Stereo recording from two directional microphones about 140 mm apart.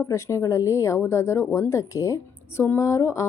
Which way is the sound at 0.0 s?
20° left (ahead or behind).